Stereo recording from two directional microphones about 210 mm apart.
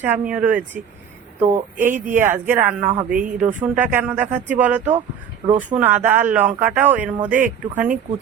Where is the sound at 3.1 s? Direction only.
40° right (ahead or behind).